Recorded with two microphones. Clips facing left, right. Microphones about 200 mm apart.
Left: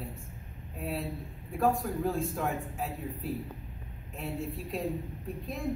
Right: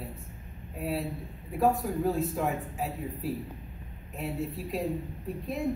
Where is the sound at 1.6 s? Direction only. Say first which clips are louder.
Right 2 dB; 5° right (ahead or behind).